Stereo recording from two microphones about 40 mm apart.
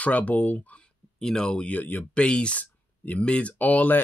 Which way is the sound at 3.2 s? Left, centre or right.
Left.